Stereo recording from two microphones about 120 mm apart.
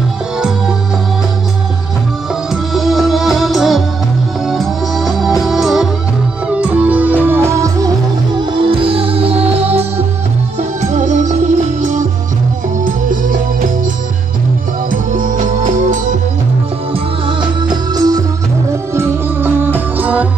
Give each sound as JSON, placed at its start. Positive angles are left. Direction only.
{"t": 2.5, "sound": "music", "side_deg": 0}
{"t": 8.5, "sound": "music", "side_deg": -45}
{"t": 10.6, "sound": "music", "side_deg": -75}
{"t": 15.3, "sound": "music", "side_deg": -90}
{"t": 16.9, "sound": "music", "side_deg": -40}
{"t": 18.9, "sound": "music", "side_deg": -15}